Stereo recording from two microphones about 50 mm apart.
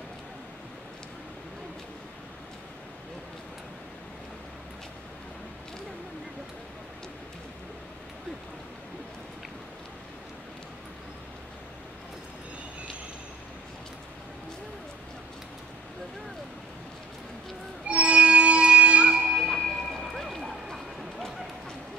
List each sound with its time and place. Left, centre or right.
17.8 s music: right
19.4 s music: centre
20.0 s a sound: centre